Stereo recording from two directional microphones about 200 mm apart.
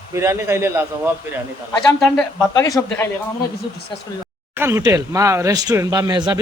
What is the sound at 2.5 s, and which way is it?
Speech, 15° left (ahead or behind).